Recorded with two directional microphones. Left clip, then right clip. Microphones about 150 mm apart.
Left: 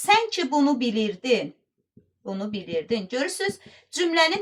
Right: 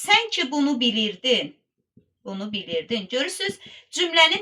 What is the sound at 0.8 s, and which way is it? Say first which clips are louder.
Speech: right 4 dB; 20° left (ahead or behind).